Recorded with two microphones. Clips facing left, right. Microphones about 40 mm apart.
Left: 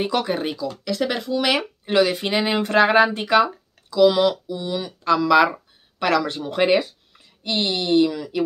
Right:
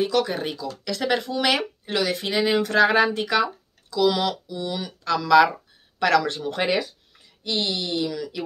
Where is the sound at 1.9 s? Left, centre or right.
Left.